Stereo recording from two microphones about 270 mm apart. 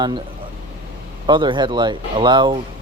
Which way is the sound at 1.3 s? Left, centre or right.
Centre.